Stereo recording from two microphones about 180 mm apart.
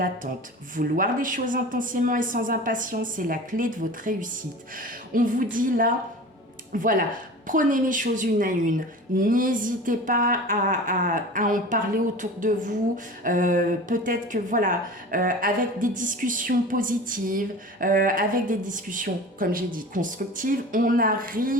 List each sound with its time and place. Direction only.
0.8 s speech: 50° right (ahead or behind)